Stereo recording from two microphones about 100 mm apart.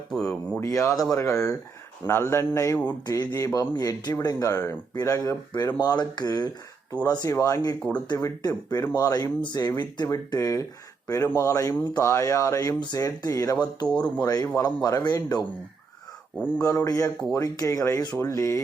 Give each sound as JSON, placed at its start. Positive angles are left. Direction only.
{"t": 0.1, "sound": "speech", "side_deg": 5}
{"t": 0.6, "sound": "speech", "side_deg": 35}
{"t": 7.8, "sound": "speech", "side_deg": 15}
{"t": 8.0, "sound": "speech", "side_deg": 45}
{"t": 13.8, "sound": "speech", "side_deg": 10}
{"t": 14.3, "sound": "speech", "side_deg": 35}
{"t": 16.6, "sound": "speech", "side_deg": 35}